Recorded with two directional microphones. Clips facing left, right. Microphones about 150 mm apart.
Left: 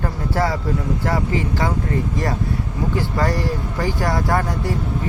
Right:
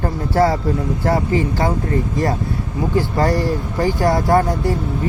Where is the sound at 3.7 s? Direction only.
30° right (ahead or behind).